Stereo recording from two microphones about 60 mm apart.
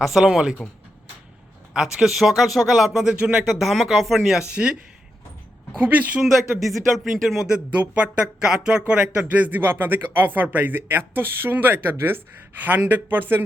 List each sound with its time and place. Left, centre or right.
0.0 s speech: centre
1.7 s speech: centre
3.2 s speech: right
3.5 s speech: centre
4.4 s speech: centre
5.8 s speech: right
6.6 s speech: centre
7.8 s speech: right
9.2 s speech: right